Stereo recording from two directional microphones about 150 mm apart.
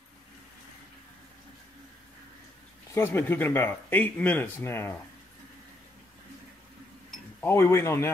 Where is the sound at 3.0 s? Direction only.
15° left (ahead or behind).